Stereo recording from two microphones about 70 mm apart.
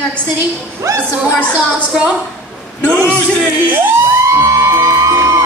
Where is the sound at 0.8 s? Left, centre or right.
Right.